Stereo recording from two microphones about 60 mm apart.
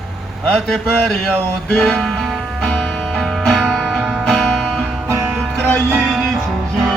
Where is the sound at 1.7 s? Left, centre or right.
Centre.